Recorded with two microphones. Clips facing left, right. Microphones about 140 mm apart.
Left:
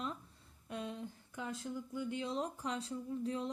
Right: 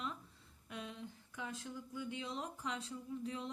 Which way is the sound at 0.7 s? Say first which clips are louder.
Left 5 dB; 40° left (ahead or behind).